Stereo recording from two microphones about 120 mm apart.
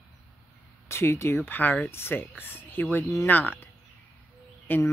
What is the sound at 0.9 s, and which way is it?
Speech, 25° left (ahead or behind).